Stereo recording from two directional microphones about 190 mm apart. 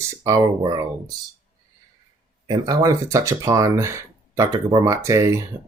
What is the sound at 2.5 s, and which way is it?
Speech, 20° right (ahead or behind).